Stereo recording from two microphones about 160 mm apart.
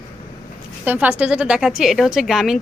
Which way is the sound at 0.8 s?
10° right (ahead or behind).